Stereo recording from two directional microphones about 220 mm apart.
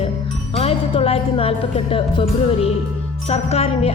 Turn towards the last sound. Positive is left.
turn(degrees=30)  # may be behind; listen again after turning